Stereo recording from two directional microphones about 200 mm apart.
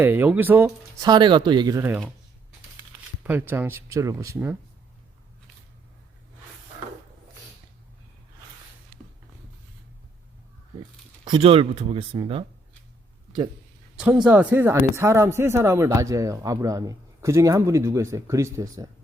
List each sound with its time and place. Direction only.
0.0 s speech: 10° right (ahead or behind)
3.2 s speech: 10° right (ahead or behind)
11.3 s speech: 25° right (ahead or behind)
14.3 s speech: 10° right (ahead or behind)